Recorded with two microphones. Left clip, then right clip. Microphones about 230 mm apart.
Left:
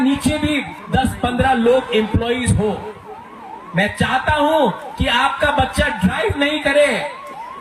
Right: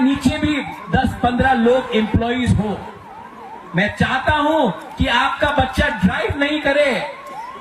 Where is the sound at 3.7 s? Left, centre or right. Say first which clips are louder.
Left 1 dB; left.